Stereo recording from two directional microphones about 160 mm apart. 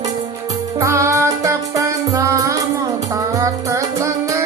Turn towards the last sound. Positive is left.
turn(degrees=-20)  # may be behind; listen again after turning